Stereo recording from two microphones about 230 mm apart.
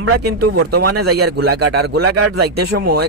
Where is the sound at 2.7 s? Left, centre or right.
Right.